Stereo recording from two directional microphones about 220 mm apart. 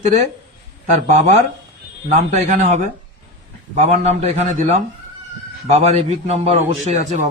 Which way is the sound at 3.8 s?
30° right (ahead or behind).